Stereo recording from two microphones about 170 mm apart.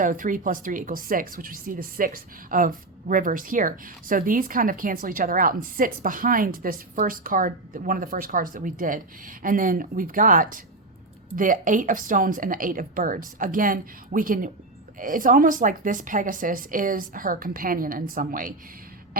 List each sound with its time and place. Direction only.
0.0 s speech: 50° right (ahead or behind)